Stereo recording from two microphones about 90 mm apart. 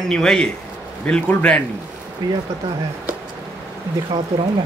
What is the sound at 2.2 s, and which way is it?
Speech, 45° right (ahead or behind).